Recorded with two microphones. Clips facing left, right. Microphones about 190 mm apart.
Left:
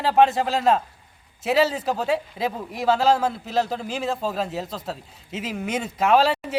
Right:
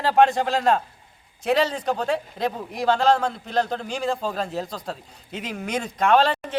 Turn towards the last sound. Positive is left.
turn(degrees=5)  # may be behind; listen again after turning